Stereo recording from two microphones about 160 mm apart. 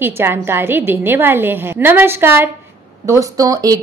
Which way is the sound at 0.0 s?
15° right (ahead or behind).